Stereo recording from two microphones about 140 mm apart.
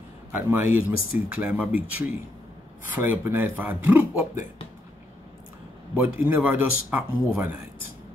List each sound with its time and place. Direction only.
0.5 s speech: 15° right (ahead or behind)
5.9 s speech: 10° right (ahead or behind)